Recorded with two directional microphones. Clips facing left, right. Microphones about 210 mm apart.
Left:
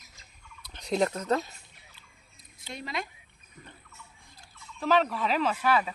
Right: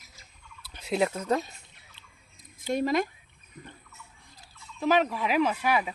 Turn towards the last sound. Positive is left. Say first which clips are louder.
# even
turn(degrees=-15)  # may be behind; listen again after turning